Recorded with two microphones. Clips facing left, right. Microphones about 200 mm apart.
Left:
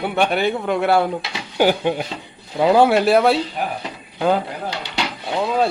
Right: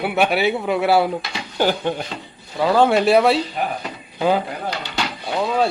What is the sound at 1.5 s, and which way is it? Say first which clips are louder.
Speech: left 3 dB; 10° left (ahead or behind).